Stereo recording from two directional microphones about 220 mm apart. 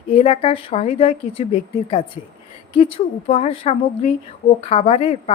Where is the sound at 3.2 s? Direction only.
30° left (ahead or behind).